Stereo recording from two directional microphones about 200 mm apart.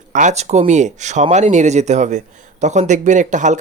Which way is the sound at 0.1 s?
35° right (ahead or behind).